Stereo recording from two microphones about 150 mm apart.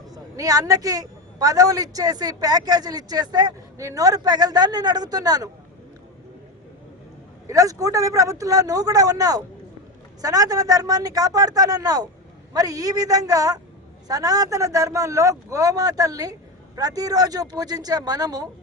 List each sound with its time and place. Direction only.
0.1 s a man's voice: 25° right (ahead or behind)
7.4 s a man's voice: 25° right (ahead or behind)